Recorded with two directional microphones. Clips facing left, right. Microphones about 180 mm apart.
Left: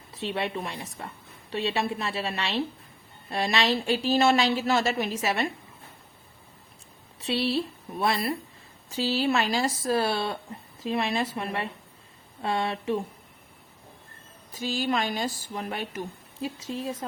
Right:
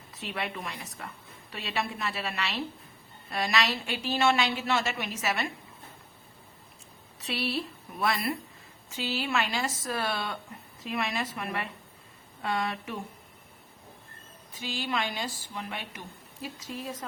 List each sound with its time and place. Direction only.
0.2 s a woman's voice: 30° left (ahead or behind)
7.2 s a woman's voice: 30° left (ahead or behind)
14.6 s speech: 40° left (ahead or behind)
16.4 s a woman's voice: 25° left (ahead or behind)